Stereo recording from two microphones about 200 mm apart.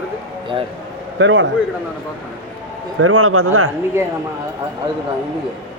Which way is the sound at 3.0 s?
90° right.